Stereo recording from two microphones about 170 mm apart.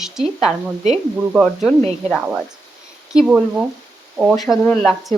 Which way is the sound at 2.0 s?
5° right (ahead or behind).